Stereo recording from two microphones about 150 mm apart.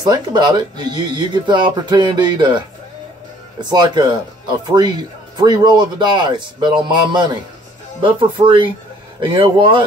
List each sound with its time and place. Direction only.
0.0 s speech: 30° right (ahead or behind)
3.6 s speech: 30° right (ahead or behind)